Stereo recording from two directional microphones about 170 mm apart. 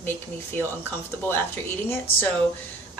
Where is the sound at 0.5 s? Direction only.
10° left (ahead or behind).